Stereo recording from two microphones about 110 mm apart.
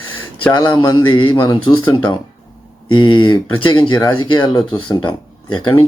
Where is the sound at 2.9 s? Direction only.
45° left (ahead or behind).